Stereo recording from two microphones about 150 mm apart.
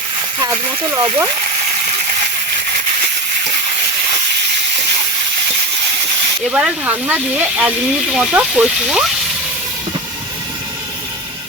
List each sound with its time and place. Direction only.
0.9 s speech: 25° right (ahead or behind)
6.5 s speech: 10° right (ahead or behind)